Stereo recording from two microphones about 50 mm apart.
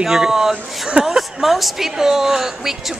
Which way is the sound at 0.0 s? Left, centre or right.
Centre.